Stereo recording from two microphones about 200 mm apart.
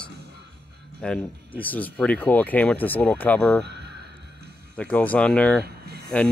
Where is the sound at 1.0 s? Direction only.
5° left (ahead or behind).